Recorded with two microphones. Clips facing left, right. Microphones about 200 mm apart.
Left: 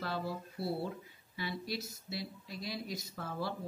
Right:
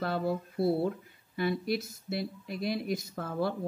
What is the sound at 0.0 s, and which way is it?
Speech, 55° right (ahead or behind).